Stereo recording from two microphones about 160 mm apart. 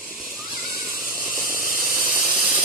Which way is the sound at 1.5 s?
60° left (ahead or behind).